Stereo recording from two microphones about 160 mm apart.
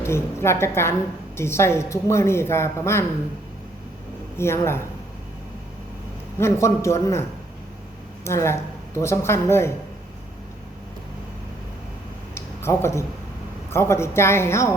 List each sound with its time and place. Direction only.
0.0 s speech: 15° left (ahead or behind)
4.4 s speech: 15° left (ahead or behind)
6.4 s speech: 20° left (ahead or behind)
12.3 s a sound: 15° left (ahead or behind)
13.7 s speech: 15° left (ahead or behind)